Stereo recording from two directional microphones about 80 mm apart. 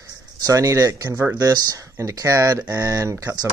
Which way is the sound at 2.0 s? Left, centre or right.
Right.